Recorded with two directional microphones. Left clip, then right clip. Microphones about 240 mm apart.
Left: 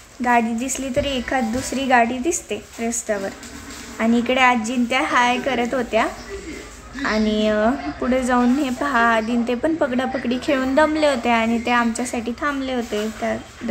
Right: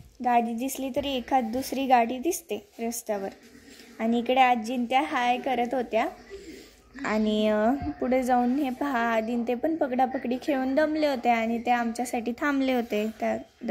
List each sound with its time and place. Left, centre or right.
0.2 s a woman's voice: centre